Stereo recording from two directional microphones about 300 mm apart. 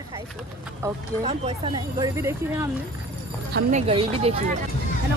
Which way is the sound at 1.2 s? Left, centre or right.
Centre.